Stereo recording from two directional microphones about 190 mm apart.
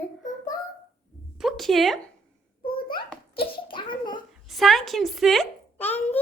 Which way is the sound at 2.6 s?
25° left (ahead or behind).